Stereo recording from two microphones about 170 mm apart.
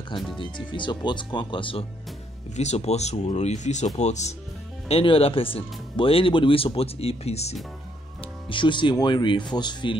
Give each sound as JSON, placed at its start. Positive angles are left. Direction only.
{"t": 0.4, "sound": "speech", "side_deg": 30}
{"t": 8.5, "sound": "speech", "side_deg": 30}